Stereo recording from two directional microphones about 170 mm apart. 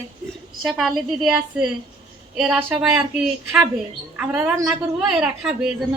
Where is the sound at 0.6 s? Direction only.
Centre (ahead or behind).